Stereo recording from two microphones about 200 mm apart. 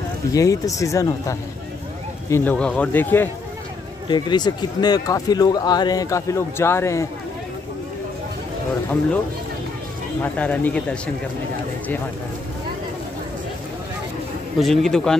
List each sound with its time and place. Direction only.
0.3 s speech: 15° left (ahead or behind)
4.1 s a man's voice: 20° left (ahead or behind)
10.3 s speech: 5° left (ahead or behind)
14.6 s speech: centre (ahead or behind)